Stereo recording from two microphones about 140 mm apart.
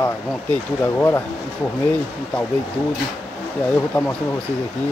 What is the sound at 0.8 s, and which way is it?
Speech, 20° left (ahead or behind).